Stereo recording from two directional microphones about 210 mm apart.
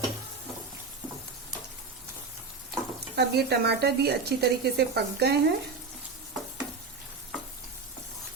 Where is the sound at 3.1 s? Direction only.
50° right (ahead or behind).